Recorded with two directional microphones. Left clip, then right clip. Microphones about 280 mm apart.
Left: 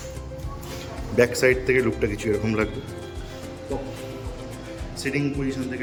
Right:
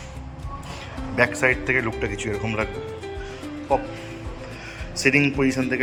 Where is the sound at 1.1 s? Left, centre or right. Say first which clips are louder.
Left 1 dB; centre.